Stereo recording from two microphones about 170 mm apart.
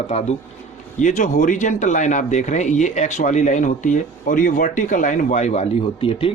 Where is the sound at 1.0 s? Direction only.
45° left (ahead or behind).